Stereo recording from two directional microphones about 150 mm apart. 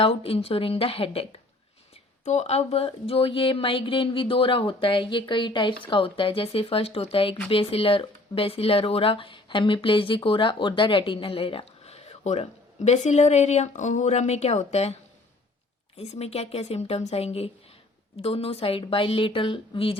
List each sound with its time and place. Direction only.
0.0 s speech: 40° left (ahead or behind)
16.0 s a woman's voice: 45° left (ahead or behind)